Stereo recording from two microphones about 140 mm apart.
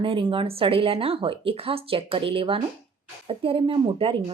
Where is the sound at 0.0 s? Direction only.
40° right (ahead or behind).